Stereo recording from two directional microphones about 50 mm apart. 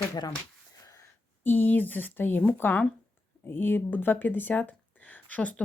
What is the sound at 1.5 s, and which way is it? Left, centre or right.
Speech, left.